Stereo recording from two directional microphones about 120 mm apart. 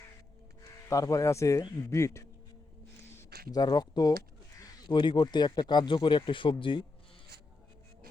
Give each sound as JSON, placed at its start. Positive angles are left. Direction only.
{"t": 0.9, "sound": "speech", "side_deg": 30}
{"t": 3.5, "sound": "speech", "side_deg": 35}